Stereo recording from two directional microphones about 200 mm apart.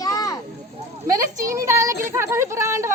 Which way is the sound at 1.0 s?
15° right (ahead or behind).